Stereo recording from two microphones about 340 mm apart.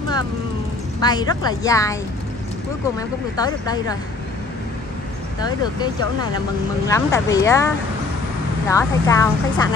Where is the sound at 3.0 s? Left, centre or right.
Centre.